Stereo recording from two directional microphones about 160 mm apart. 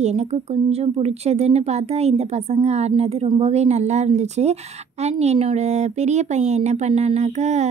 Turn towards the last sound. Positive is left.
turn(degrees=-45)  # may be behind; listen again after turning